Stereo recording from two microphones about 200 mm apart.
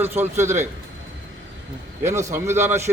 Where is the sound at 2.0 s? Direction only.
15° right (ahead or behind).